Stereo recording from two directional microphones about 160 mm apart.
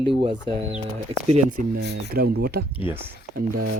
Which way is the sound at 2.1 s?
80° right.